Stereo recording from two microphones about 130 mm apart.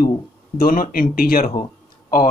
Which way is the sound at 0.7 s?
90° left.